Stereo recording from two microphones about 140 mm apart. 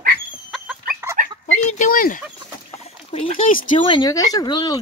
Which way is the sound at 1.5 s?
55° left (ahead or behind).